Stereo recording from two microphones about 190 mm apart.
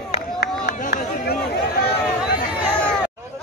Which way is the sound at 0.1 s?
35° left (ahead or behind).